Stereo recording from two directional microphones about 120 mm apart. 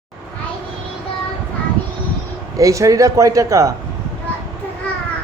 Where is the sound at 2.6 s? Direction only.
25° right (ahead or behind).